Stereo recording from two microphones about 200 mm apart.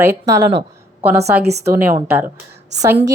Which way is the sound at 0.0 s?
15° right (ahead or behind).